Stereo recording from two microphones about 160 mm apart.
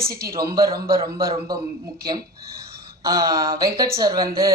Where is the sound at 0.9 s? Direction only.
20° right (ahead or behind).